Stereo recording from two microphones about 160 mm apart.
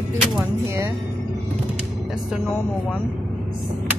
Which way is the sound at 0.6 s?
15° right (ahead or behind).